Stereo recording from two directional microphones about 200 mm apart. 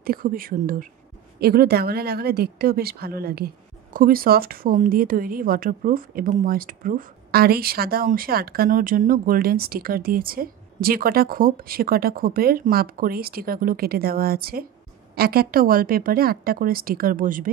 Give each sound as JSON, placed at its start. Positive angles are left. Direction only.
{"t": 0.0, "sound": "speech", "side_deg": -45}